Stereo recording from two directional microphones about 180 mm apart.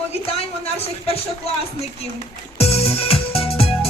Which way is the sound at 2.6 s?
35° left (ahead or behind).